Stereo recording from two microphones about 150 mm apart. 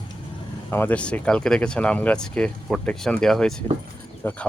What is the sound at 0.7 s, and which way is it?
Speech, 10° left (ahead or behind).